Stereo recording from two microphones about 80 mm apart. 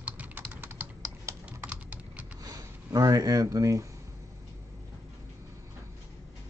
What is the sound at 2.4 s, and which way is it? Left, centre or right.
Speech, right.